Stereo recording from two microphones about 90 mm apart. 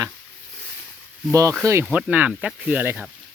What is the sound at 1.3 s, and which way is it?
Speech, 35° right (ahead or behind).